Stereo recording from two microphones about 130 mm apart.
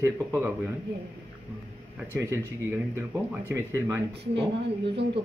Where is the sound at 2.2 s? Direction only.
20° right (ahead or behind).